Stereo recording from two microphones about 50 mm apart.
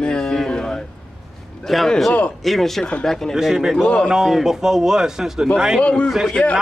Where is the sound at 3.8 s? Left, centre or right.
Left.